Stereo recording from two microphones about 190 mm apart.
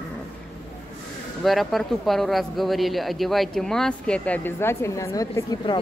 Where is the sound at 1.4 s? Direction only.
Centre (ahead or behind); by 5.8 s 20° left (ahead or behind).